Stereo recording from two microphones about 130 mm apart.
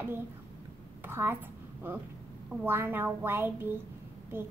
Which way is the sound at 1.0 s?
15° right (ahead or behind).